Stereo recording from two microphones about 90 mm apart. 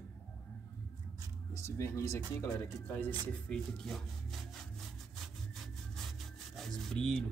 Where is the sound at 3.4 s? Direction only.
5° left (ahead or behind).